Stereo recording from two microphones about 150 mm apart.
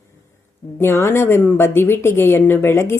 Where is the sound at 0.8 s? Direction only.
15° left (ahead or behind).